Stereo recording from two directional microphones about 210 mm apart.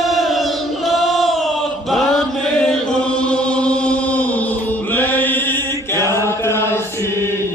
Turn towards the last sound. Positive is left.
turn(degrees=10)  # may be behind; listen again after turning